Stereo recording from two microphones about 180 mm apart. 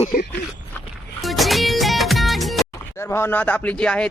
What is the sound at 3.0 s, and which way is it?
Speech, 15° left (ahead or behind).